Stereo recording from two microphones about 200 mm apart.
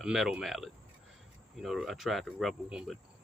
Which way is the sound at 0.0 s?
5° right (ahead or behind).